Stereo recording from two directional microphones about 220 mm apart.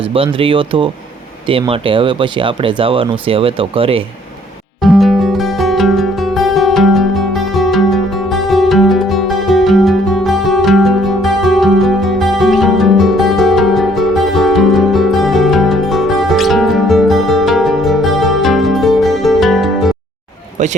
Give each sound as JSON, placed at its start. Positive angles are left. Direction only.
{"t": 0.0, "sound": "speech", "side_deg": -25}
{"t": 4.8, "sound": "music", "side_deg": 0}